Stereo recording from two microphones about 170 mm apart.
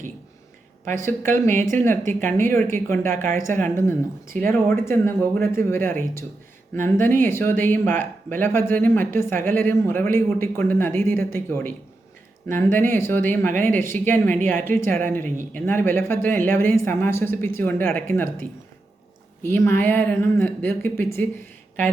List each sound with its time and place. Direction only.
0.9 s speech: 15° left (ahead or behind)
19.5 s speech: 15° left (ahead or behind)